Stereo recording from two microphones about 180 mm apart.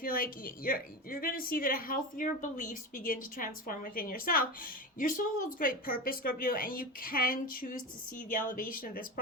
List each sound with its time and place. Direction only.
0.0 s a woman's voice: 55° left (ahead or behind)